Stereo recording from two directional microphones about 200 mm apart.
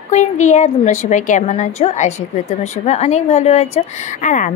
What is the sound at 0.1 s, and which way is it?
A woman's voice, 35° left (ahead or behind).